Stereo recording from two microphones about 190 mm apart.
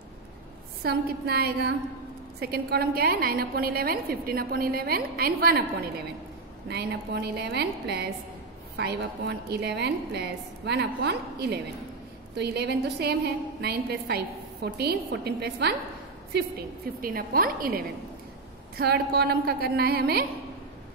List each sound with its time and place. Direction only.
0.8 s a woman's voice: 55° right (ahead or behind)
6.7 s a woman's voice: 60° right (ahead or behind)